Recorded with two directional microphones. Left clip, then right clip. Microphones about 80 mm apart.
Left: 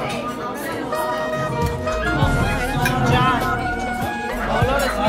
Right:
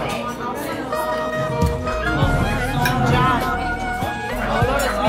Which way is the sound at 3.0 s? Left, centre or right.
Centre.